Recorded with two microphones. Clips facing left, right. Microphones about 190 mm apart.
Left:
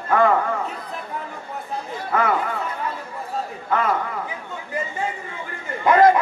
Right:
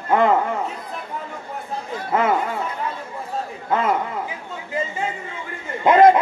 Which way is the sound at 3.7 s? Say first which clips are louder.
Right 1 dB; 20° right (ahead or behind).